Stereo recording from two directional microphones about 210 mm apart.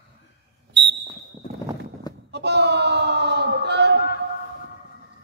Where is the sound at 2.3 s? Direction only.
55° right (ahead or behind).